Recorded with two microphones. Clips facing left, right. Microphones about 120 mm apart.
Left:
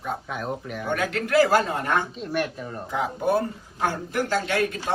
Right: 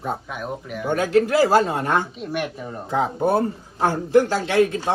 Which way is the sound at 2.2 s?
10° right (ahead or behind).